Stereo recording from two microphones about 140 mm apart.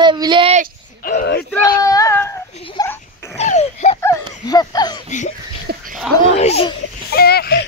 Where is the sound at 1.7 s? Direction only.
25° left (ahead or behind).